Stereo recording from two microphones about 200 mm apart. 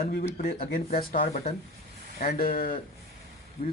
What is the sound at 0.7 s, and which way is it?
Speech, 45° left (ahead or behind).